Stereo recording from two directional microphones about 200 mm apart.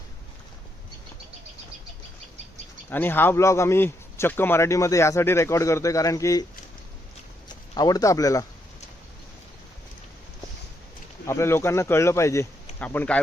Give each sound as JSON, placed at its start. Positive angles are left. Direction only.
{"t": 2.9, "sound": "speech", "side_deg": 10}
{"t": 7.4, "sound": "a man's voice", "side_deg": 20}
{"t": 11.3, "sound": "speech", "side_deg": 15}